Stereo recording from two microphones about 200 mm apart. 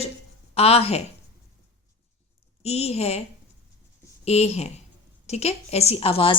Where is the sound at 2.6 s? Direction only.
30° left (ahead or behind).